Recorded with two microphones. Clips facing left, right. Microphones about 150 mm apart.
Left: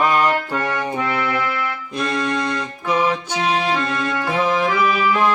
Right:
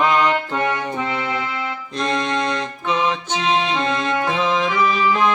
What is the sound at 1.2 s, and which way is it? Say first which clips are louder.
Music: left 3 dB; 25° right (ahead or behind).